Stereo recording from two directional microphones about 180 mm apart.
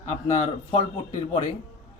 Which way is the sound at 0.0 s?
40° left (ahead or behind).